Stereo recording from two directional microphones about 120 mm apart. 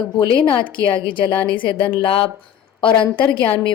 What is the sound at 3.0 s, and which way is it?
Speech, 45° left (ahead or behind).